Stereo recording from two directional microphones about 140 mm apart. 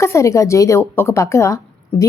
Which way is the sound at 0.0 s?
20° left (ahead or behind).